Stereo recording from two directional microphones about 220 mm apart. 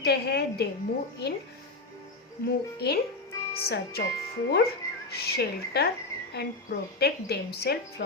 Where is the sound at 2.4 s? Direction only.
45° left (ahead or behind).